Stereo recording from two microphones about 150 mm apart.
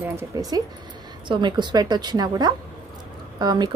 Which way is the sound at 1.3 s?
30° right (ahead or behind).